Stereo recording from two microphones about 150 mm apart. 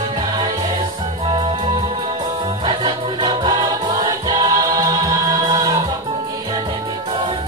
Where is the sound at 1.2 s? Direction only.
30° right (ahead or behind).